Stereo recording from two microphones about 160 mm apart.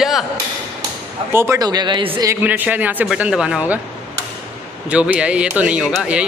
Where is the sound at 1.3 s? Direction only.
15° right (ahead or behind).